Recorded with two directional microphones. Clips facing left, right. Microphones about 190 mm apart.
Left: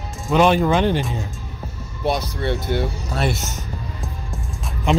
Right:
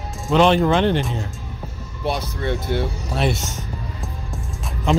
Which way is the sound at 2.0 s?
40° left (ahead or behind).